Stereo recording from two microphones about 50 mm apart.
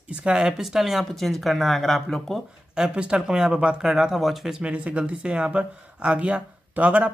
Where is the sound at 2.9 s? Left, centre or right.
Right; by 4.6 s centre.